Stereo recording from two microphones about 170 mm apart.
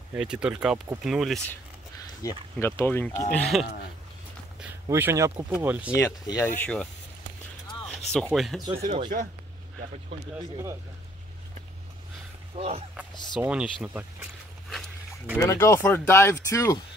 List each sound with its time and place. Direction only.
0.1 s speech: 5° right (ahead or behind)
2.6 s speech: 15° left (ahead or behind)
4.8 s speech: 15° right (ahead or behind)
5.9 s speech: 20° left (ahead or behind)
6.6 s speech: 5° left (ahead or behind)
8.1 s speech: centre (ahead or behind)
8.7 s speech: 35° right (ahead or behind)
10.3 s speech: 15° right (ahead or behind)
12.5 s speech: 35° right (ahead or behind)
13.1 s speech: 25° left (ahead or behind)
13.4 s speech: 5° right (ahead or behind)
15.3 s speech: 15° left (ahead or behind)